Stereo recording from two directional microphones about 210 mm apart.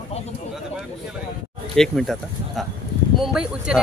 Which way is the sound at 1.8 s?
Centre (ahead or behind).